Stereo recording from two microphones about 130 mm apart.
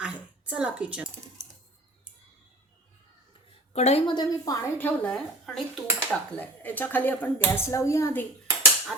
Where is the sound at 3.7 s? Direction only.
55° left (ahead or behind).